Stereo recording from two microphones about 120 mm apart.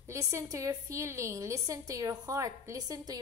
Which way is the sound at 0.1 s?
25° right (ahead or behind).